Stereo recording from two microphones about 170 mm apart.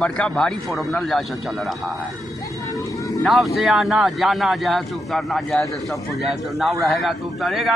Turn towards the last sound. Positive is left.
turn(degrees=0)  # may be behind; listen again after turning